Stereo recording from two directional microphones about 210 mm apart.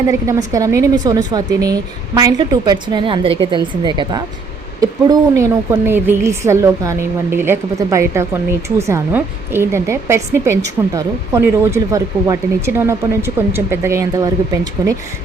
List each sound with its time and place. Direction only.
0.1 s a woman's voice: 15° right (ahead or behind)